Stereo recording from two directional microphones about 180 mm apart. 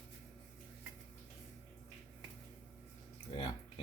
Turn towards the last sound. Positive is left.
turn(degrees=25)  # may be behind; listen again after turning